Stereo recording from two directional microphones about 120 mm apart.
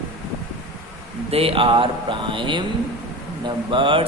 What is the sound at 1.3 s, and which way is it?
A man's voice, 50° right (ahead or behind).